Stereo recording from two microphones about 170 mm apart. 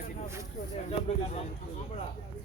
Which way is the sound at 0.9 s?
40° left (ahead or behind).